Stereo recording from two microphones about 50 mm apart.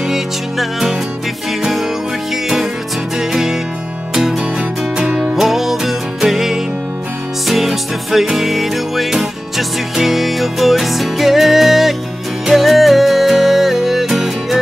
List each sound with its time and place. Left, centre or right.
0.0 s music: centre
2.3 s music: centre
4.6 s music: centre
5.4 s music: centre